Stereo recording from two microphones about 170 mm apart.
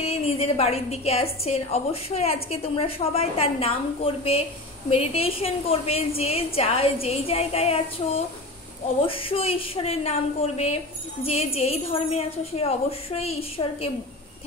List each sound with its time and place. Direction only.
0.0 s a woman's voice: 35° left (ahead or behind)
9.0 s a woman's voice: 35° left (ahead or behind)